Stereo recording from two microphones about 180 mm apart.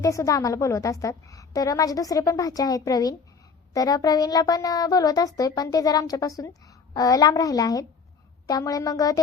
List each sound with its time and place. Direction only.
0.0 s a woman's voice: 15° left (ahead or behind)